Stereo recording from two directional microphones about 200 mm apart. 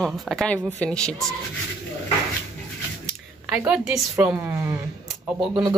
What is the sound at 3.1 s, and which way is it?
Speech, 5° right (ahead or behind).